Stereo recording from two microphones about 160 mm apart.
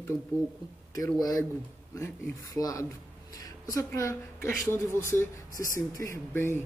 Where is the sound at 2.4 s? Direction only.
20° left (ahead or behind).